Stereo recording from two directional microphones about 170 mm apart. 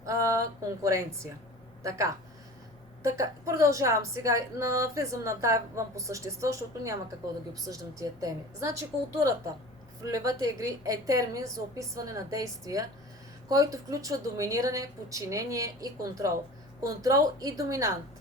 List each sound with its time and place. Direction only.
0.0 s a woman's voice: 20° right (ahead or behind)